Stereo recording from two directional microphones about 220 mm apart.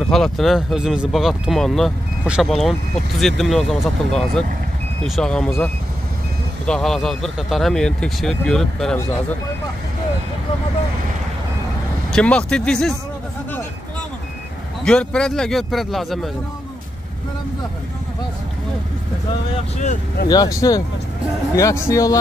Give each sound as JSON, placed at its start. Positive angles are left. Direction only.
{"t": 0.1, "sound": "speech", "side_deg": 0}
{"t": 12.1, "sound": "speech", "side_deg": 5}
{"t": 14.9, "sound": "speech", "side_deg": 5}
{"t": 19.8, "sound": "speech", "side_deg": 35}
{"t": 20.2, "sound": "speech", "side_deg": 15}